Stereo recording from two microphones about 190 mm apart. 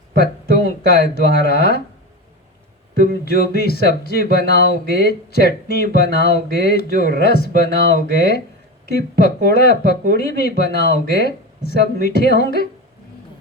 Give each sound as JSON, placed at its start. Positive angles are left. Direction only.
{"t": 0.2, "sound": "speech", "side_deg": 55}
{"t": 3.0, "sound": "speech", "side_deg": 55}